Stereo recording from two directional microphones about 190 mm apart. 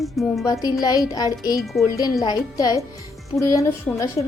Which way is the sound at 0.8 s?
20° left (ahead or behind).